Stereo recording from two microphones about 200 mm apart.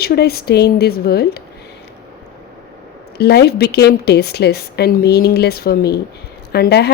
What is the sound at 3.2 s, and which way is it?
A woman's voice, 55° left (ahead or behind).